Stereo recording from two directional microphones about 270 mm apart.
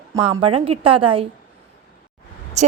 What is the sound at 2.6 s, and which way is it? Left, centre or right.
Speech, right.